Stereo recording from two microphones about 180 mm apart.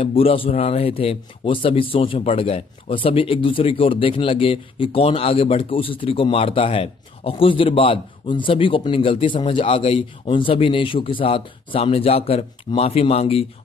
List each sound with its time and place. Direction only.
0.0 s a man's voice: 30° left (ahead or behind)